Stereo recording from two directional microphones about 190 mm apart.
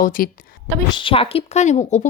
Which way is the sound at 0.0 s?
50° left (ahead or behind).